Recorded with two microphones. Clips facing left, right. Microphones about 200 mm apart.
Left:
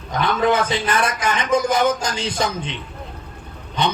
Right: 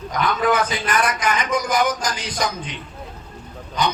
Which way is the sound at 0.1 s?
25° left (ahead or behind).